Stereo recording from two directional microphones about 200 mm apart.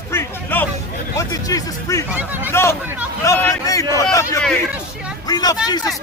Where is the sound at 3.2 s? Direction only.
15° left (ahead or behind).